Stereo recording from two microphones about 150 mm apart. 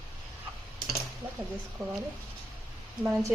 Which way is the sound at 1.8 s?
Centre (ahead or behind).